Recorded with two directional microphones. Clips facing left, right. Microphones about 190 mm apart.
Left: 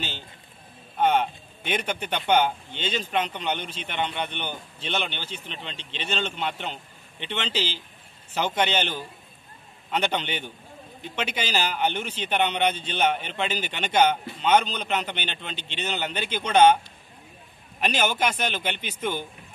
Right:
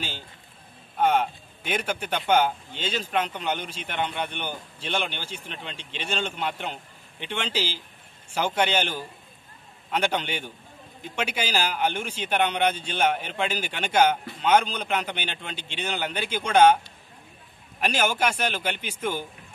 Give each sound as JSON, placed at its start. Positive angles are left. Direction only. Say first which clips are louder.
{"t": 0.9, "sound": "a man's voice", "louder": "even", "side_deg": -5}
{"t": 17.7, "sound": "a man's voice", "louder": "even", "side_deg": -10}